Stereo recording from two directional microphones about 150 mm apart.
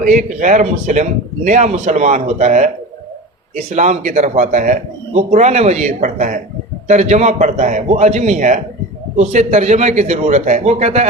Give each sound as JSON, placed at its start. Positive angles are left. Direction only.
{"t": 0.0, "sound": "a man's voice", "side_deg": -55}